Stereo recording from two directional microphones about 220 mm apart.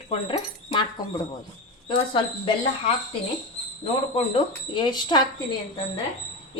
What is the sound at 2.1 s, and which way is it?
Speech, 25° left (ahead or behind).